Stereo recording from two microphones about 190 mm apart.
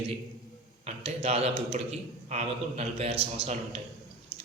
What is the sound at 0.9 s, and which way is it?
A man's voice, 35° right (ahead or behind).